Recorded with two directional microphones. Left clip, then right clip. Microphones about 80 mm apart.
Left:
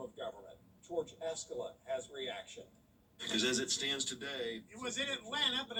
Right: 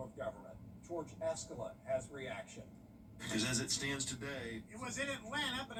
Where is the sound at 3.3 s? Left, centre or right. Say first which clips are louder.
Left 4 dB; left.